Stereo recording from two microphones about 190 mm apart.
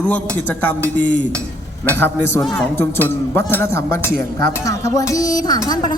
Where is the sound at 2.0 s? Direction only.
15° left (ahead or behind).